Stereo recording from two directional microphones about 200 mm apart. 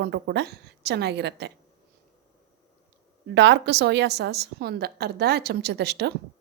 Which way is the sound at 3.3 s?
60° right (ahead or behind).